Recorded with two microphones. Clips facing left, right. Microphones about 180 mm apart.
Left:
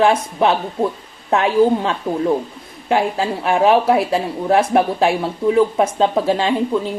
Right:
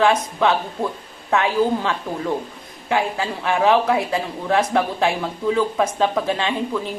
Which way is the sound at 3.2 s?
25° left (ahead or behind).